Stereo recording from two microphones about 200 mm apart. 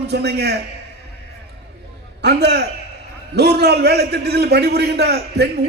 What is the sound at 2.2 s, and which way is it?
A man's voice, 55° right (ahead or behind).